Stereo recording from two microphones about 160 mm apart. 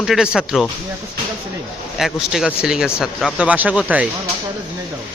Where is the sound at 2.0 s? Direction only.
5° right (ahead or behind).